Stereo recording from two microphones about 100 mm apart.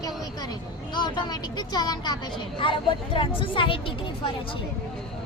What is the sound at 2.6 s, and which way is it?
Speech, 60° left (ahead or behind).